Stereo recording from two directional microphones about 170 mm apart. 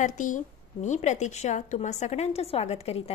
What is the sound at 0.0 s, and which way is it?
A woman's voice, 50° left (ahead or behind).